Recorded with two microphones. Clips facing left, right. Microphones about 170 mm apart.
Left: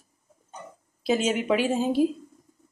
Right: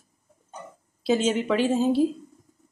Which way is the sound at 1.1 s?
10° left (ahead or behind).